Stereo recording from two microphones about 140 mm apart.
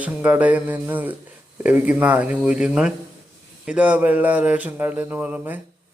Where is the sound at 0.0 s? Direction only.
10° right (ahead or behind).